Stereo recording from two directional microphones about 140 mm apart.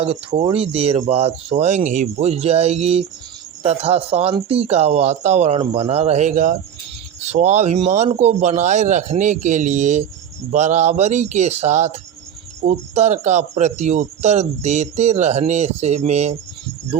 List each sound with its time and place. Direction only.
0.0 s speech: 45° right (ahead or behind); by 6.6 s 65° right (ahead or behind)
7.2 s a man's voice: 55° right (ahead or behind)